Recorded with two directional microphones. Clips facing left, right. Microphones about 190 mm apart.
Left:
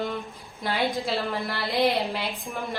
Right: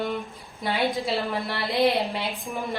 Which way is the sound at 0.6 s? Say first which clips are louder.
Right 1 dB; centre (ahead or behind).